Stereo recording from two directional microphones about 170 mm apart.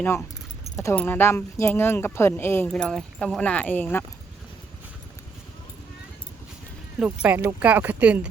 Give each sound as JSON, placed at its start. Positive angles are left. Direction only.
{"t": 0.8, "sound": "speech", "side_deg": 15}
{"t": 7.0, "sound": "speech", "side_deg": -5}